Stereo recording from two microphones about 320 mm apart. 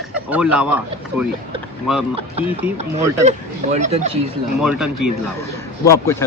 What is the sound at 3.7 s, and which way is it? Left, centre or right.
Speech, right.